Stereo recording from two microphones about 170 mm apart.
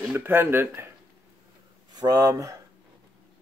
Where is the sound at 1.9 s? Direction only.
25° right (ahead or behind).